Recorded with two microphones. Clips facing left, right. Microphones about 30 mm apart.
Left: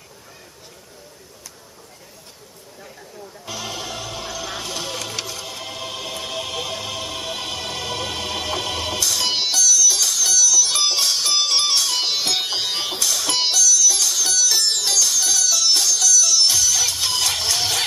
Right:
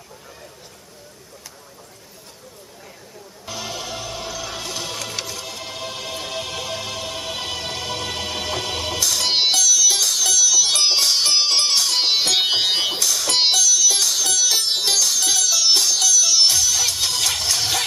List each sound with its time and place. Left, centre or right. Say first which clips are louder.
3.4 s music: even; centre
9.3 s music: right 3 dB; right
13.0 s music: right 1 dB; centre
13.4 s music: right 1 dB; right
16.4 s music: even; centre
17.2 s music: even; centre